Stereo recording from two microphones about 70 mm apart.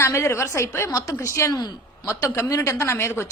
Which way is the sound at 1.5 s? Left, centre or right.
Left.